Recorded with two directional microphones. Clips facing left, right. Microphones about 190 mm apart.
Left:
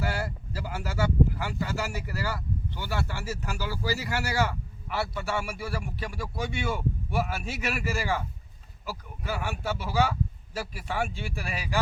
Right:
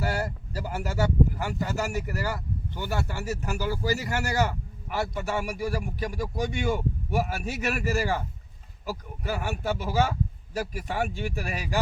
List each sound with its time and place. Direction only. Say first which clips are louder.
0.0 s speech: right 2 dB; 40° right (ahead or behind)